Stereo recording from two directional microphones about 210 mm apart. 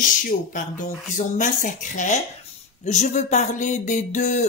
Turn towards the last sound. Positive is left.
turn(degrees=35)  # may be behind; listen again after turning